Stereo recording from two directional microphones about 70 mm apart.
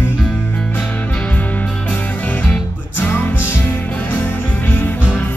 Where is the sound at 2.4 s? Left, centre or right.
Left.